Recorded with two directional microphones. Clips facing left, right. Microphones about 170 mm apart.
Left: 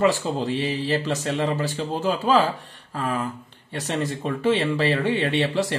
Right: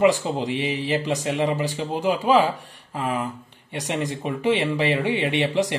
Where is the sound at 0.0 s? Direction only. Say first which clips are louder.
Right 2 dB; 15° right (ahead or behind).